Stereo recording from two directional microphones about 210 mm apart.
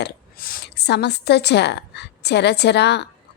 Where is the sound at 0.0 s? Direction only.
50° left (ahead or behind).